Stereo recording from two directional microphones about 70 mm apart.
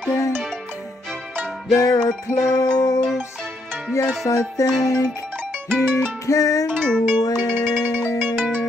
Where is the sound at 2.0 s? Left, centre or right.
Left.